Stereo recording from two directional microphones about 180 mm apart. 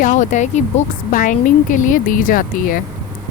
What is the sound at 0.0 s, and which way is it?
Speech, 45° left (ahead or behind).